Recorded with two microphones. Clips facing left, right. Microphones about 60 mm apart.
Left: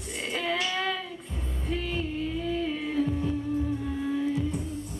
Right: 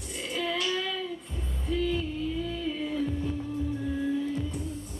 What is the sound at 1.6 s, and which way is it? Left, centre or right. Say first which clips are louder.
Music: right 3 dB; left.